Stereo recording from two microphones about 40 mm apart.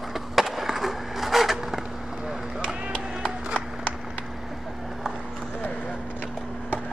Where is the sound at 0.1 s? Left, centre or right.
Centre.